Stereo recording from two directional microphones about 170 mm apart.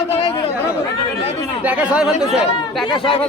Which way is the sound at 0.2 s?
35° left (ahead or behind).